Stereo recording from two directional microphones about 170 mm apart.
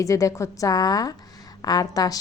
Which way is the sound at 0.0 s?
20° left (ahead or behind).